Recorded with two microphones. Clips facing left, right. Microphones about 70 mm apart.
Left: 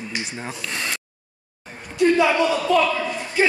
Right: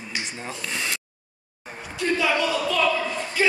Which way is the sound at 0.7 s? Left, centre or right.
Centre.